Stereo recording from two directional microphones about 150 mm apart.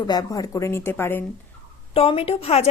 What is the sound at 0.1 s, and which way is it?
Speech, 25° left (ahead or behind).